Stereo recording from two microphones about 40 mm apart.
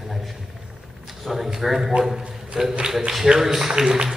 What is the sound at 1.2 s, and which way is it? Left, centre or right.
A man's voice, centre.